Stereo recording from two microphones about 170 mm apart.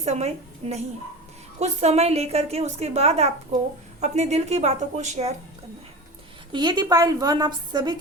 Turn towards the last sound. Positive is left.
turn(degrees=-25)  # may be behind; listen again after turning